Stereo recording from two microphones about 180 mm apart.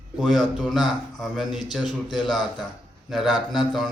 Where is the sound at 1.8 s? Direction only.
25° left (ahead or behind).